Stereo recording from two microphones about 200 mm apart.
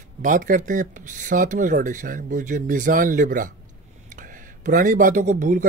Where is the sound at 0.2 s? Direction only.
40° right (ahead or behind).